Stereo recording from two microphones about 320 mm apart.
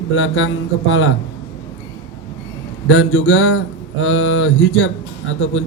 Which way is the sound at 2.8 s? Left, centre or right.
Left.